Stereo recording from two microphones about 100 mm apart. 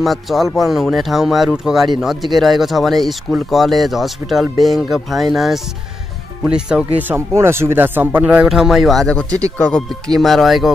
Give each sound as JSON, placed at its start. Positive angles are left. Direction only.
{"t": 0.0, "sound": "speech", "side_deg": 0}
{"t": 8.5, "sound": "speech", "side_deg": -5}
{"t": 9.6, "sound": "speech", "side_deg": 10}